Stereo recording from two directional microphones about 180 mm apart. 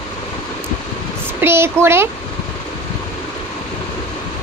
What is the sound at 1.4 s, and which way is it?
Speech, 15° right (ahead or behind).